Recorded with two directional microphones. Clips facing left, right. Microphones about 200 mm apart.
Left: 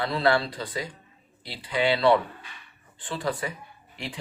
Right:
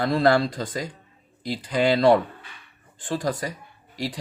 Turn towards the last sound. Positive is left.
turn(degrees=-35)  # may be behind; listen again after turning